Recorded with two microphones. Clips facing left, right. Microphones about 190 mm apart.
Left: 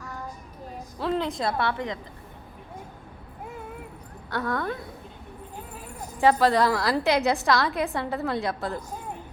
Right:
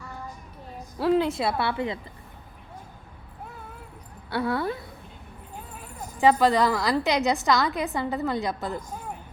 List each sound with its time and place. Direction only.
0.9 s a woman's voice: 5° right (ahead or behind)
4.3 s a woman's voice: 10° right (ahead or behind)
6.1 s a woman's voice: centre (ahead or behind)